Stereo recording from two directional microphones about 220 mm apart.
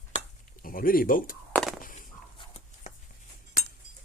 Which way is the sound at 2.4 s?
30° left (ahead or behind).